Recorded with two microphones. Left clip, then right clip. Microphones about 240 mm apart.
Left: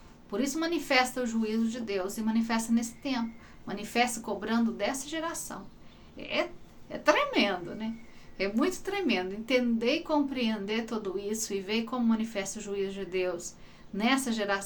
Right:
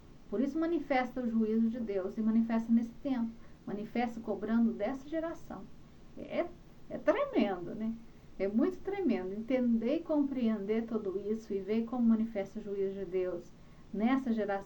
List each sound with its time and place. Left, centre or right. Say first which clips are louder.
0.3 s a woman's voice: left 2 dB; centre
6.9 s a woman's voice: left 5 dB; centre